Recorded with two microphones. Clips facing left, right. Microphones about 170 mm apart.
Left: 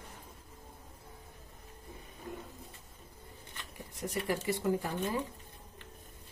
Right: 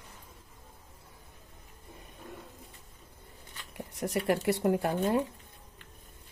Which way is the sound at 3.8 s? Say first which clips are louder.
Right 5 dB; 70° right (ahead or behind).